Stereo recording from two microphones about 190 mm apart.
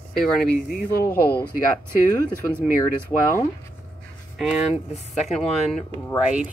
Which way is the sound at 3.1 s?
15° left (ahead or behind).